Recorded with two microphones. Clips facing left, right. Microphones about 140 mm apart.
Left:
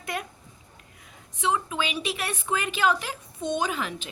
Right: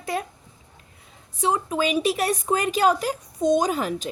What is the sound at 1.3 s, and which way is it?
A woman's voice, 40° right (ahead or behind).